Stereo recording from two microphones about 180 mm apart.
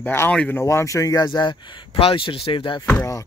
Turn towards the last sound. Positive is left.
turn(degrees=15)  # may be behind; listen again after turning